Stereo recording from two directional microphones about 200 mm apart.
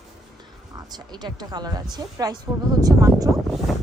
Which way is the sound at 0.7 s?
20° right (ahead or behind).